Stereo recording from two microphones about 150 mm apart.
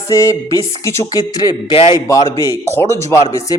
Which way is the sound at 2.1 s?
20° left (ahead or behind).